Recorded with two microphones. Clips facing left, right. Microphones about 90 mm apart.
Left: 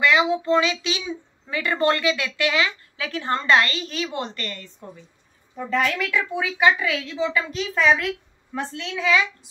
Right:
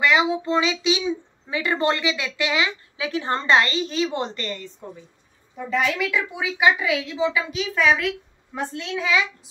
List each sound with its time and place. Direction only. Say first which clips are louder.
0.0 s a woman's voice: even; 20° right (ahead or behind)
5.7 s a woman's voice: even; 10° right (ahead or behind)
7.5 s a woman's voice: left 3 dB; centre (ahead or behind)
8.9 s a woman's voice: left 2 dB; 20° right (ahead or behind)